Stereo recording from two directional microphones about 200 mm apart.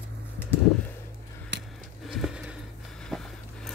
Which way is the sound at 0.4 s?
10° left (ahead or behind).